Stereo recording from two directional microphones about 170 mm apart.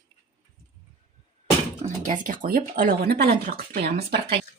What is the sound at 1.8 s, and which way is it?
Speech, 50° right (ahead or behind).